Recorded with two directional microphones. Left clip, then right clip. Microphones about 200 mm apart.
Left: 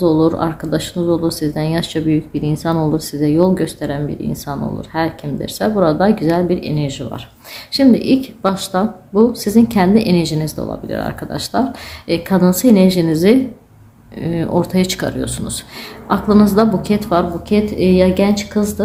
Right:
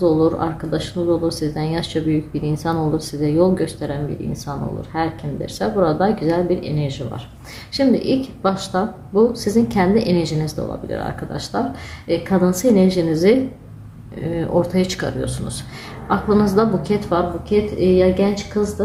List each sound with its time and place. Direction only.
0.0 s speech: 30° left (ahead or behind)
4.9 s a woman's voice: 30° left (ahead or behind)